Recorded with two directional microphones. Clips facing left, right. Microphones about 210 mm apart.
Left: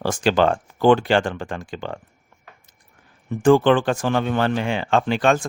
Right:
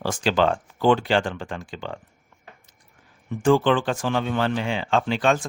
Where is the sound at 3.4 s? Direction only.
55° left (ahead or behind).